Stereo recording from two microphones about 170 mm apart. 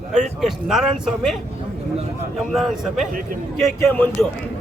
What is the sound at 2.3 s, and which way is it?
Speech, centre (ahead or behind).